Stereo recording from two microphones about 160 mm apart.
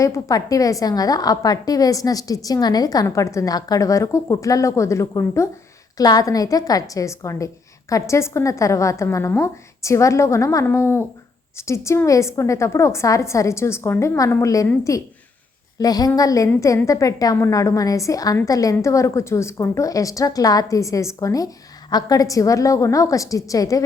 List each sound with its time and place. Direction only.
0.0 s a woman's voice: 20° left (ahead or behind)